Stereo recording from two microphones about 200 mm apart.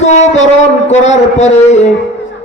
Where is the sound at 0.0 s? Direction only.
35° left (ahead or behind).